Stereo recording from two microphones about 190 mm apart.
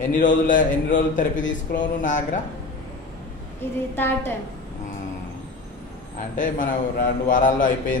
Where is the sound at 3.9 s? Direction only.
10° left (ahead or behind).